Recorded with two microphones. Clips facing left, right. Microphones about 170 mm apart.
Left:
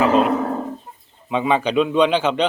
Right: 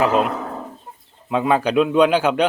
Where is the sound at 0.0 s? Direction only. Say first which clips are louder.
Left 2 dB; 5° right (ahead or behind).